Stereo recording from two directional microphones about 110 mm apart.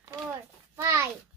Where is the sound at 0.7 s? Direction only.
20° right (ahead or behind).